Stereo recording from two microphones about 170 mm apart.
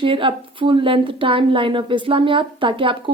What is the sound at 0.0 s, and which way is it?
A woman's voice, 30° right (ahead or behind).